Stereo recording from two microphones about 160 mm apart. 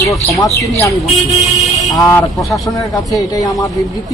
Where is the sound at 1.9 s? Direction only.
20° left (ahead or behind).